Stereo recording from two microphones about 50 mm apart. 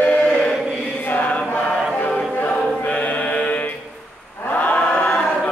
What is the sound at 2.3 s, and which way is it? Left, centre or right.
Choir, left.